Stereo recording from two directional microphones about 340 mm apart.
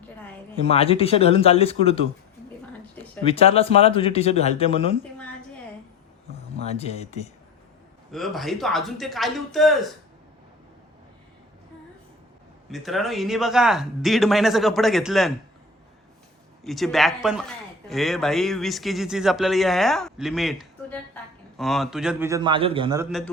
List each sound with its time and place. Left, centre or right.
0.5 s speech: centre
3.2 s speech: centre
6.6 s speech: centre
8.1 s a man's voice: centre
12.7 s a man's voice: centre
16.6 s a man's voice: centre